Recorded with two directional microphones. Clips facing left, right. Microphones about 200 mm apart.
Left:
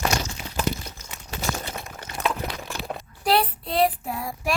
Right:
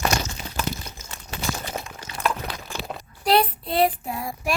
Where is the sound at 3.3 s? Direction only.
Centre (ahead or behind).